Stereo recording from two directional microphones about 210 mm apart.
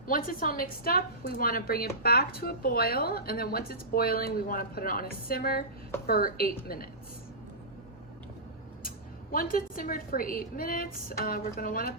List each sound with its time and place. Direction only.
0.1 s speech: 40° left (ahead or behind)
9.3 s speech: 45° left (ahead or behind)